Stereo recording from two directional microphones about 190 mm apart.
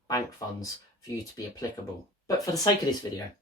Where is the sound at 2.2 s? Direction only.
20° left (ahead or behind).